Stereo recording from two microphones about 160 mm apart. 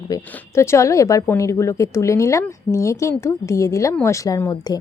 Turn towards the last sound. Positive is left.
turn(degrees=20)  # may be behind; listen again after turning